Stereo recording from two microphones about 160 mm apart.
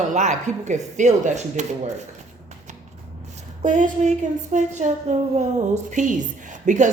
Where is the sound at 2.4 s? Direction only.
50° right (ahead or behind).